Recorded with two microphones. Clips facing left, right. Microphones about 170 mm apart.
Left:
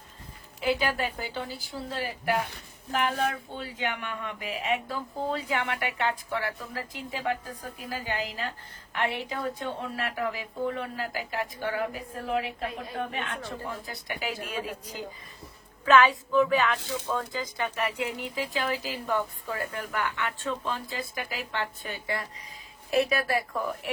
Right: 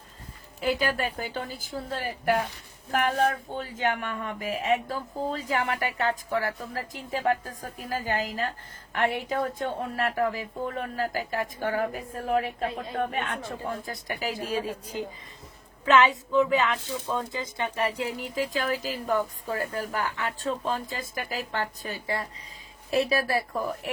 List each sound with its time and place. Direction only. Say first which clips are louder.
0.6 s speech: right 1 dB; 45° right (ahead or behind)